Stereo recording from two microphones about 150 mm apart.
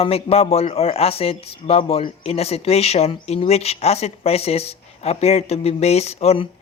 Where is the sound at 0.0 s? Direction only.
40° left (ahead or behind).